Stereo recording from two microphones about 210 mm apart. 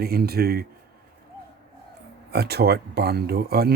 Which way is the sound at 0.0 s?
45° right (ahead or behind).